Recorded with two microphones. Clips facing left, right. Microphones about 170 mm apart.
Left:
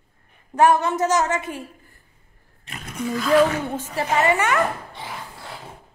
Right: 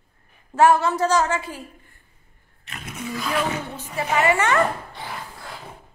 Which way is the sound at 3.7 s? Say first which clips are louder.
Left 5 dB; 45° left (ahead or behind).